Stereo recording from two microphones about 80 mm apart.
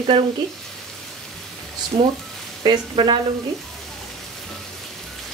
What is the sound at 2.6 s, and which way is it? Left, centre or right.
Speech, right.